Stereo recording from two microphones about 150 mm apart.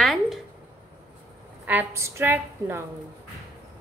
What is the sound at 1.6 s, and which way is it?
A woman's voice, 10° right (ahead or behind).